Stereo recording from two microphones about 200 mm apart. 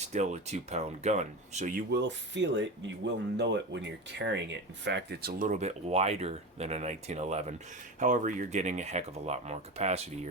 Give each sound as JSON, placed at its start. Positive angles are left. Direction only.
{"t": 0.1, "sound": "speech", "side_deg": -35}
{"t": 1.9, "sound": "speech", "side_deg": -60}
{"t": 5.4, "sound": "speech", "side_deg": -35}